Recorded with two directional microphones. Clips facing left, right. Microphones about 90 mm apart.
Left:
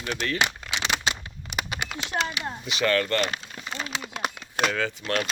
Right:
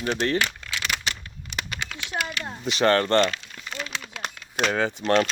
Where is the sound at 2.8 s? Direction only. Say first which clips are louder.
Right 4 dB; 35° right (ahead or behind).